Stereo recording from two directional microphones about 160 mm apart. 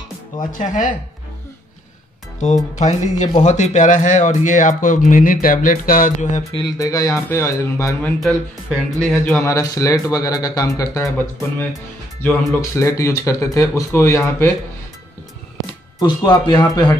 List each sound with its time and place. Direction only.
0.4 s speech: 55° left (ahead or behind)
2.8 s speech: 45° left (ahead or behind)
6.5 s speech: 25° left (ahead or behind)
8.2 s a man's voice: 5° left (ahead or behind)
9.4 s speech: 20° left (ahead or behind)
12.7 s speech: 20° left (ahead or behind)
16.0 s speech: 25° left (ahead or behind)